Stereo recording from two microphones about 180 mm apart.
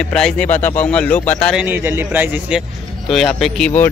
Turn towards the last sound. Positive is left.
turn(degrees=5)  # may be behind; listen again after turning